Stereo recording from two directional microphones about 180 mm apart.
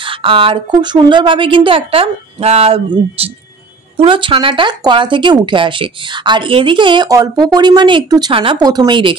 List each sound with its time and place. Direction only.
0.0 s speech: 30° right (ahead or behind)